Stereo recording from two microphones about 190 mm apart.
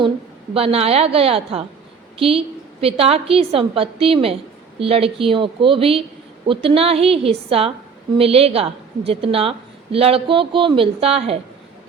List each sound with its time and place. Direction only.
0.5 s a woman's voice: 30° right (ahead or behind)